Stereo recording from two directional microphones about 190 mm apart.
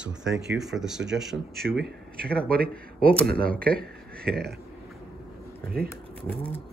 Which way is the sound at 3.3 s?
5° left (ahead or behind).